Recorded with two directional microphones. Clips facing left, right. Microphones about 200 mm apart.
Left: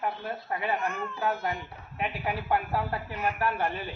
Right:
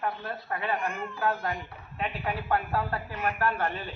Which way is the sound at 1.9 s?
10° left (ahead or behind).